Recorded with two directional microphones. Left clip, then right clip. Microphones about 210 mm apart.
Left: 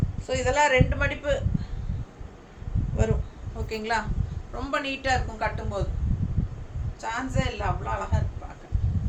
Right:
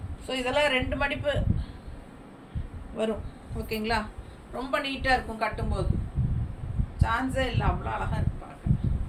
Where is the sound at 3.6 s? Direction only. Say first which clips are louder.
Left 1 dB; 15° left (ahead or behind).